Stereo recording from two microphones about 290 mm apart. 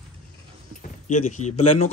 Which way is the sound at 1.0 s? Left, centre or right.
Left.